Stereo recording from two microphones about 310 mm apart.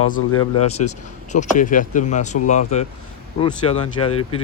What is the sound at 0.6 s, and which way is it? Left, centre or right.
Speech, left.